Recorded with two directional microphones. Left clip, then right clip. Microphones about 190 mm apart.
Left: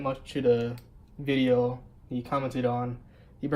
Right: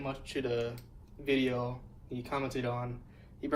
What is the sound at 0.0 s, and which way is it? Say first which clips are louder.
Speech: left 9 dB; 55° left (ahead or behind).